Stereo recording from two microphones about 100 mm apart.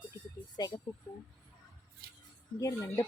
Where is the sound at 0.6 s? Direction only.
40° left (ahead or behind).